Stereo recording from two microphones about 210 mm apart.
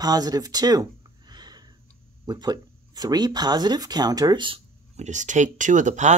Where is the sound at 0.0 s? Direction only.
20° right (ahead or behind).